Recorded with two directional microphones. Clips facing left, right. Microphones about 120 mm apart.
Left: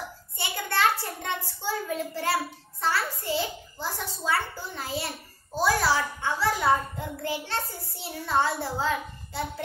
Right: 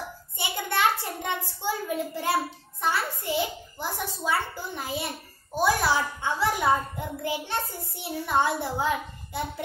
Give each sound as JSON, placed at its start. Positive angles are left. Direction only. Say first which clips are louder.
{"t": 0.4, "sound": "a child's voice", "louder": "even", "side_deg": -20}